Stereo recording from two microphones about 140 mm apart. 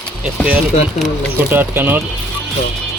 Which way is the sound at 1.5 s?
15° right (ahead or behind).